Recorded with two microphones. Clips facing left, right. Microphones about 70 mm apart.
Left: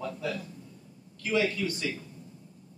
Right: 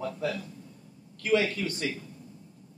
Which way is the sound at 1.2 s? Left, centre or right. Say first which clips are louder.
Right 2 dB; right.